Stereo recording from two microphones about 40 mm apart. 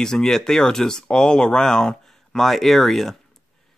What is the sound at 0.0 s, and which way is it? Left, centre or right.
Speech, centre.